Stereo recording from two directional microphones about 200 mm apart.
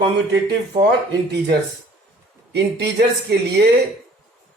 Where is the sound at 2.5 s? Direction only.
55° right (ahead or behind).